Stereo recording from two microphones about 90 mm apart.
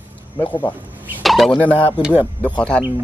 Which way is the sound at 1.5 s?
20° left (ahead or behind).